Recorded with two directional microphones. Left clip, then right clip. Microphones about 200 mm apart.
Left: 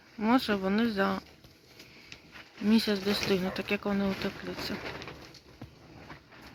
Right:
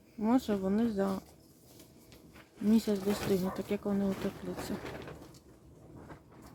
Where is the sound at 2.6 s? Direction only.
10° right (ahead or behind).